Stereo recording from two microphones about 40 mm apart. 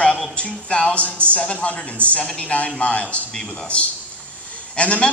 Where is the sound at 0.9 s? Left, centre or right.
Left.